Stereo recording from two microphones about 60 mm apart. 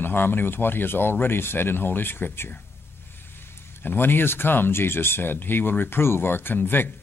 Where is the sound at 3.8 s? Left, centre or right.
Left.